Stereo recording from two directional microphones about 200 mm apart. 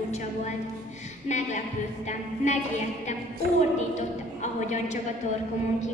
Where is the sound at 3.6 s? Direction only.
35° left (ahead or behind).